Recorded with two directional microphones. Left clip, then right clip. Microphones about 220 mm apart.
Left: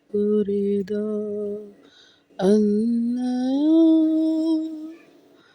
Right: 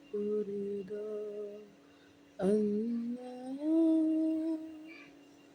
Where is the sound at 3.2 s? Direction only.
40° left (ahead or behind).